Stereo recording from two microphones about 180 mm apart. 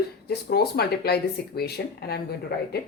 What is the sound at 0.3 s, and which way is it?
Speech, 60° left (ahead or behind).